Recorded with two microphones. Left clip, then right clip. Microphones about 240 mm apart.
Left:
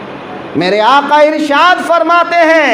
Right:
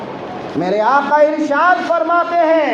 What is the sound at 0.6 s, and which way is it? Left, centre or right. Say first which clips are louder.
Speech: left 5 dB; left.